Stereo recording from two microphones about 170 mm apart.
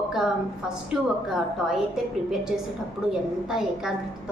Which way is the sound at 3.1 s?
Centre (ahead or behind).